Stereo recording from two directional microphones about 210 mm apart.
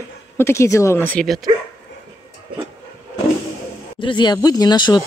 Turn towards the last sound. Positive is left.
turn(degrees=20)  # may be behind; listen again after turning